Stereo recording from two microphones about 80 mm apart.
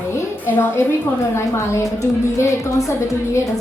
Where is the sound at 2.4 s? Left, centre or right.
Left.